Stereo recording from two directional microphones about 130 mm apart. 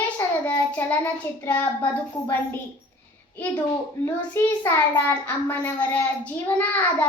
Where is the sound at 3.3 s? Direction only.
10° left (ahead or behind).